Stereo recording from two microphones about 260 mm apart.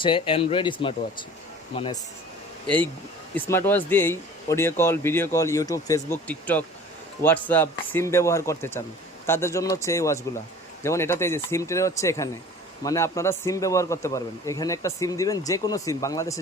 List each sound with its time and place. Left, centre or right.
0.0 s speech: centre
2.6 s speech: centre